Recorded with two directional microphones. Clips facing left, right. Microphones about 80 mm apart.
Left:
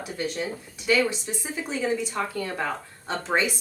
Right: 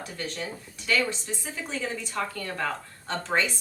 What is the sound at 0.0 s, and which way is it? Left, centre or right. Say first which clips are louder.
Speech: left 5 dB; centre.